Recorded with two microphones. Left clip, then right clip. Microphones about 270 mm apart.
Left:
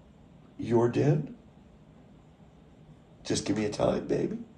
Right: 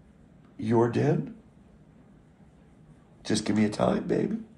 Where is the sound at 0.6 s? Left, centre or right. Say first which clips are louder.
Right 1 dB; right.